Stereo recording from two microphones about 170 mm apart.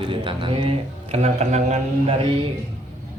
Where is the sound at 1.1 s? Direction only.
40° right (ahead or behind).